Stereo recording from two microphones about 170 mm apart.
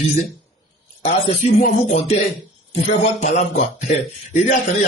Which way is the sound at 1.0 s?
40° left (ahead or behind).